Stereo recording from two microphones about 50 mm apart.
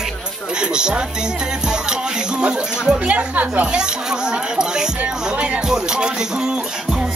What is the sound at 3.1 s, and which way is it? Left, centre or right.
Speech, right.